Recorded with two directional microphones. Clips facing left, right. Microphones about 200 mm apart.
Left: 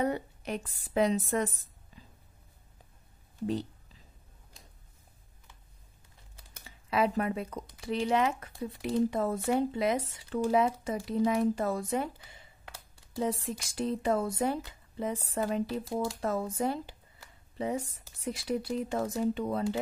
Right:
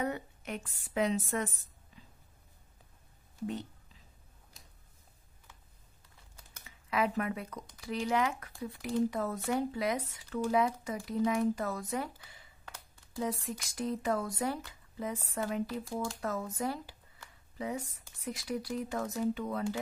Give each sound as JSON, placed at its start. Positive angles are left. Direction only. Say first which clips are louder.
{"t": 0.0, "sound": "a woman's voice", "louder": "left 5 dB", "side_deg": 30}
{"t": 6.6, "sound": "a woman's voice", "louder": "left 3 dB", "side_deg": 30}